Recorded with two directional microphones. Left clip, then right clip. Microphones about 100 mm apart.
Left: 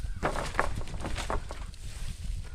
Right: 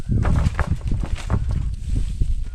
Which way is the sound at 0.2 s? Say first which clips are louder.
Right 1 dB; centre (ahead or behind).